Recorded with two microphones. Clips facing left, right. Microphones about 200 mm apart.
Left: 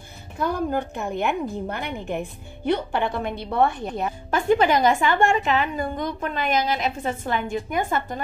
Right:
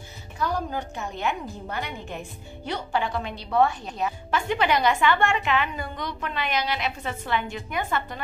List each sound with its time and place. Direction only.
0.4 s a woman's voice: 55° left (ahead or behind)